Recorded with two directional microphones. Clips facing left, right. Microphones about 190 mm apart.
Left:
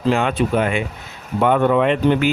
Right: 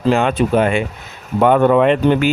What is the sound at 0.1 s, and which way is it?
Speech, 40° right (ahead or behind).